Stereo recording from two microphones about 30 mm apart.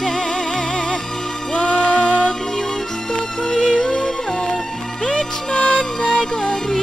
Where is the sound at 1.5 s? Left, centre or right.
Left; by 4.6 s centre.